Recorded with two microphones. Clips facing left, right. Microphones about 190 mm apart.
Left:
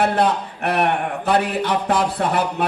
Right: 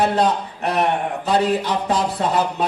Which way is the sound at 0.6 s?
60° left (ahead or behind).